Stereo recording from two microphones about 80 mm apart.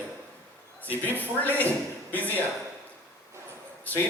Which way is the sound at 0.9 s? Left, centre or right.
Left.